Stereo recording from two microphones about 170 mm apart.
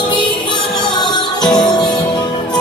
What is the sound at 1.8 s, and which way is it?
Music, 5° left (ahead or behind).